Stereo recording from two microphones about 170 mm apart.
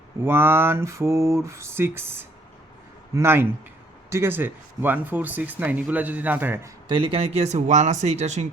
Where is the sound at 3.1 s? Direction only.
15° right (ahead or behind).